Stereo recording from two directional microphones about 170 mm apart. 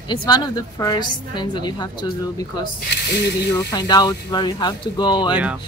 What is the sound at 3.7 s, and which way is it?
A woman's voice, 25° left (ahead or behind).